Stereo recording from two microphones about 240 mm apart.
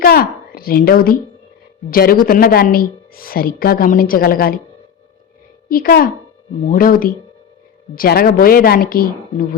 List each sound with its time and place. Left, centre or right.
0.0 s a sound: left
1.9 s a woman's voice: left
5.6 s a woman's voice: left